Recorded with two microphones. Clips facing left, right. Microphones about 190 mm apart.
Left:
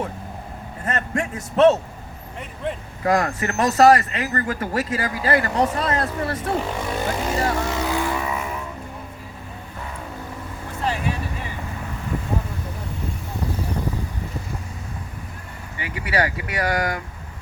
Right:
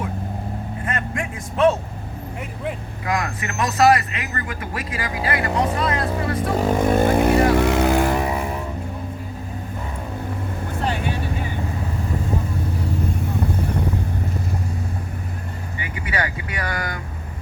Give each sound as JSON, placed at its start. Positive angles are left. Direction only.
{"t": 0.9, "sound": "speech", "side_deg": 40}
{"t": 3.0, "sound": "speech", "side_deg": 40}
{"t": 6.6, "sound": "vehicle", "side_deg": -45}
{"t": 10.8, "sound": "vehicle", "side_deg": 0}
{"t": 16.0, "sound": "speech", "side_deg": 35}